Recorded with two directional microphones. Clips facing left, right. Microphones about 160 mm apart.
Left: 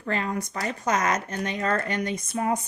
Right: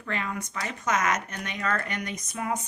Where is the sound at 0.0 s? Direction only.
35° left (ahead or behind).